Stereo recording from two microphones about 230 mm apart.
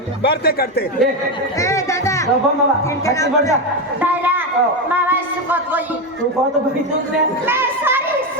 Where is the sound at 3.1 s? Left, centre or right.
Centre.